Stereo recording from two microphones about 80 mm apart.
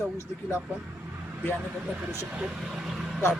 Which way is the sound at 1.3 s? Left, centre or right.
Centre.